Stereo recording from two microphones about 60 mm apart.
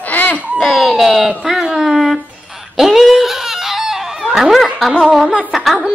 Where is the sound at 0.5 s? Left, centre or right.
Centre.